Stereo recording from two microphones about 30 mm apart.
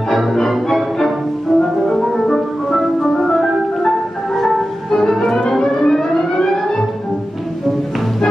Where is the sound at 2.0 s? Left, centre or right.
Centre.